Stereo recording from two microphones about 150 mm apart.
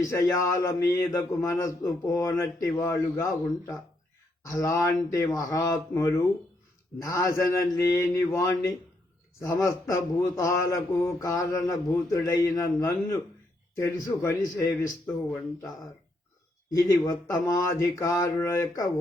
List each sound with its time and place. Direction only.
0.0 s a man's voice: 20° left (ahead or behind)
16.7 s a man's voice: 25° left (ahead or behind)